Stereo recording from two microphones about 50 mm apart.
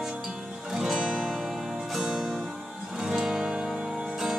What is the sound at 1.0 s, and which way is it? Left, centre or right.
Music, centre.